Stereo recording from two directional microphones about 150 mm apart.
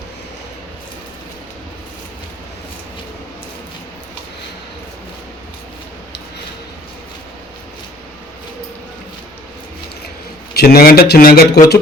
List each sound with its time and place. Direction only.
10.5 s speech: 85° left